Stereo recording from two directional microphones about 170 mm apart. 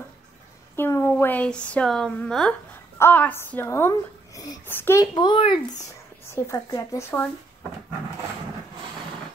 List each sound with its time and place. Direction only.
0.7 s a woman's voice: 15° left (ahead or behind)
5.1 s speech: 25° left (ahead or behind)
6.3 s speech: 15° left (ahead or behind)